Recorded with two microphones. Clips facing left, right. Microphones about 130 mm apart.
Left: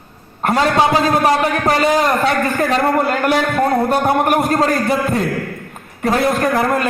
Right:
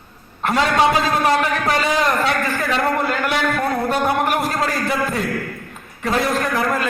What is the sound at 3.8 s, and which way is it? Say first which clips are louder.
Speech: left 4 dB; 45° left (ahead or behind).